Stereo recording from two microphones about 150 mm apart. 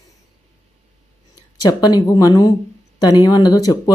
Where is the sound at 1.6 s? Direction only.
25° left (ahead or behind).